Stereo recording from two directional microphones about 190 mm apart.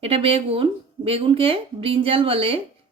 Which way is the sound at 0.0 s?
30° right (ahead or behind).